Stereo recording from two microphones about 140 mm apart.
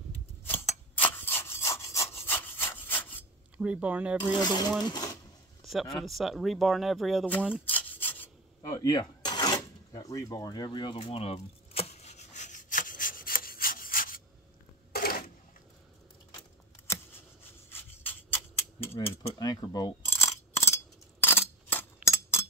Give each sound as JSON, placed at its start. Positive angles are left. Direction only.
{"t": 0.9, "sound": "sawing", "side_deg": 15}
{"t": 3.5, "sound": "speech", "side_deg": -10}
{"t": 4.2, "sound": "speech", "side_deg": 30}
{"t": 5.7, "sound": "speech", "side_deg": 0}
{"t": 7.6, "sound": "rub", "side_deg": 15}
{"t": 8.6, "sound": "a sound", "side_deg": 25}
{"t": 14.9, "sound": "cash register", "side_deg": 90}
{"t": 17.6, "sound": "a sound", "side_deg": 15}
{"t": 18.9, "sound": "speech", "side_deg": 25}
{"t": 20.1, "sound": "a sound", "side_deg": 20}